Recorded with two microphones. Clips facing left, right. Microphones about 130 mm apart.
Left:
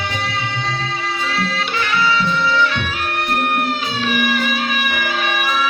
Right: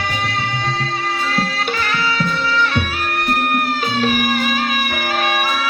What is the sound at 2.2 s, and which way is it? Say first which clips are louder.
Music: left 2 dB; 45° right (ahead or behind).